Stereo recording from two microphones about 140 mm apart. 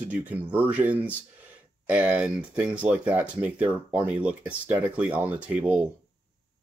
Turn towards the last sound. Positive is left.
turn(degrees=-10)  # may be behind; listen again after turning